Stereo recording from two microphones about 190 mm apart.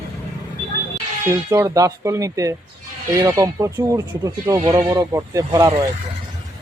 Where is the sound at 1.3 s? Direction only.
15° right (ahead or behind).